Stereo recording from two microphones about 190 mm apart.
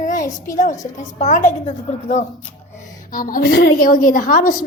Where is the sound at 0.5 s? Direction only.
40° left (ahead or behind).